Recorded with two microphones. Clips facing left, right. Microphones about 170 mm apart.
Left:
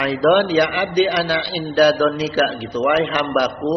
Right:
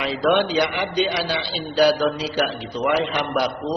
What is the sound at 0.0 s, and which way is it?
A man's voice, 60° left (ahead or behind).